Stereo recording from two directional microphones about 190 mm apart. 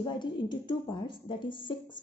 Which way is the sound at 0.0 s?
25° left (ahead or behind).